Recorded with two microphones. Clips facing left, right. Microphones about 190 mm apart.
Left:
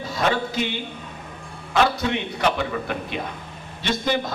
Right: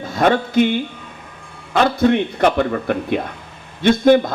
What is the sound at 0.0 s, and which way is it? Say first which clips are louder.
A man's voice: right 6 dB; 50° right (ahead or behind).